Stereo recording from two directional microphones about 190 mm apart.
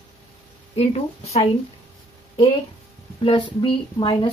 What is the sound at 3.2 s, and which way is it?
Speech, 25° left (ahead or behind).